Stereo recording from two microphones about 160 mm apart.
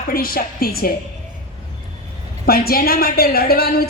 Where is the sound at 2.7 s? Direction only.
70° left (ahead or behind).